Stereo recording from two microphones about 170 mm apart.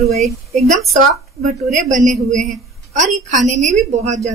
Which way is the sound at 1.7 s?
45° right (ahead or behind).